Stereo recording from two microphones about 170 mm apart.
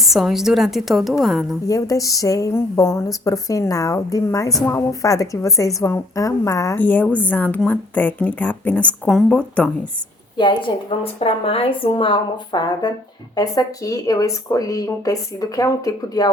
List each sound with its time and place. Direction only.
0.0 s a woman's voice: centre (ahead or behind)
1.6 s a woman's voice: 20° left (ahead or behind)
10.3 s a woman's voice: 30° left (ahead or behind)